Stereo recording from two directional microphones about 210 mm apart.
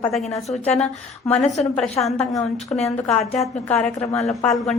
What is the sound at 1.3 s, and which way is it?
Speech, 35° left (ahead or behind).